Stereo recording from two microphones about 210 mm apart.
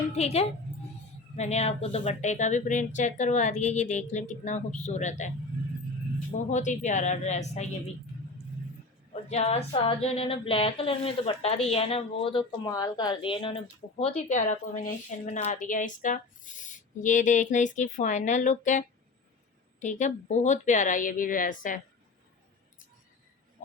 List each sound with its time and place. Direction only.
0.2 s speech: 30° left (ahead or behind)
6.5 s speech: 35° left (ahead or behind)
9.3 s speech: 30° left (ahead or behind)